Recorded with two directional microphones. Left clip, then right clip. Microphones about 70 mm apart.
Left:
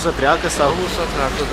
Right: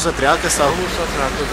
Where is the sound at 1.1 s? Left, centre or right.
Centre.